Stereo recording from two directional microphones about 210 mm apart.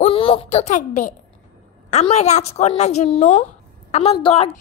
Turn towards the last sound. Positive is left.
turn(degrees=25)  # may be behind; listen again after turning